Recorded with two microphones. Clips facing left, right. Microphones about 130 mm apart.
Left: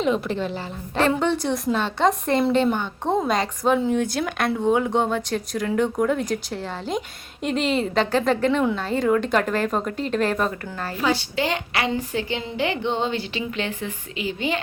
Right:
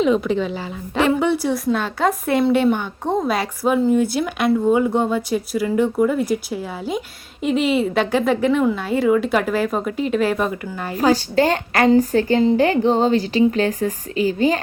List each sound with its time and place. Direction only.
0.0 s a woman's voice: centre (ahead or behind)
0.9 s a woman's voice: 10° right (ahead or behind)
10.9 s a woman's voice: 40° right (ahead or behind)